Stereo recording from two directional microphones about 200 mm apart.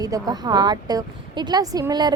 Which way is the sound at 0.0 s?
20° right (ahead or behind).